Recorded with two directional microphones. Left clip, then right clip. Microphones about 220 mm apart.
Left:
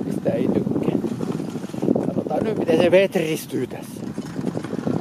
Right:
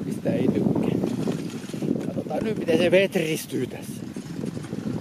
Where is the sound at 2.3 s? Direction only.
Centre (ahead or behind).